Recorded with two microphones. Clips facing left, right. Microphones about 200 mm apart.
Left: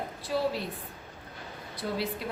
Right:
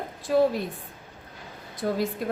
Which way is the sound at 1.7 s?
45° right (ahead or behind).